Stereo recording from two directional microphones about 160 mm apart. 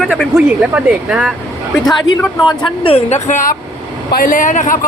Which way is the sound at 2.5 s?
30° left (ahead or behind).